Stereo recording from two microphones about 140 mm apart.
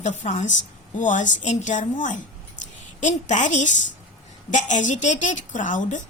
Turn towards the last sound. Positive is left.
turn(degrees=65)  # may be behind; listen again after turning